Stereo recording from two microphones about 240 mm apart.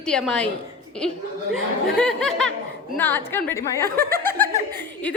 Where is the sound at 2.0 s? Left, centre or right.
Centre.